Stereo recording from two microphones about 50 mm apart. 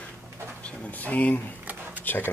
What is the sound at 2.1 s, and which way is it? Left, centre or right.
Speech, left.